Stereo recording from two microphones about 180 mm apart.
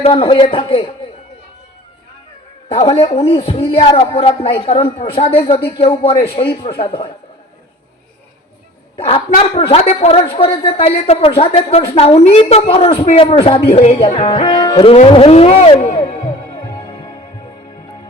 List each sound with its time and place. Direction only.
0.0 s a woman's voice: 30° left (ahead or behind)
2.6 s a woman's voice: 30° left (ahead or behind)
9.0 s a woman's voice: 30° left (ahead or behind)